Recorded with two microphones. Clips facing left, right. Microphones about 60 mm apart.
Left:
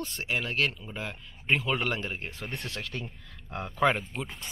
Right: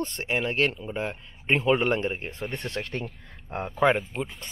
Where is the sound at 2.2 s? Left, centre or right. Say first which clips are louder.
Right 5 dB; centre.